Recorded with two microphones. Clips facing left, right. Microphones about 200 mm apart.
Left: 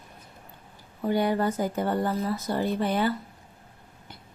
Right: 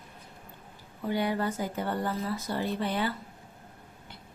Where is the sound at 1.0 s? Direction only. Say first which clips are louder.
Left 5 dB; 45° left (ahead or behind).